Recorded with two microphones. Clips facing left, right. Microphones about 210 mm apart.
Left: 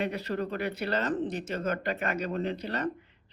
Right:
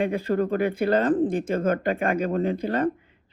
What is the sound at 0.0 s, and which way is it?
Speech, 50° right (ahead or behind).